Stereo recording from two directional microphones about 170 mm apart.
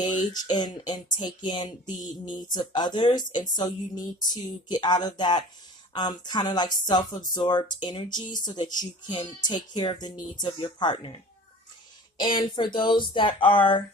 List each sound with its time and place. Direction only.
0.0 s speech: 25° left (ahead or behind)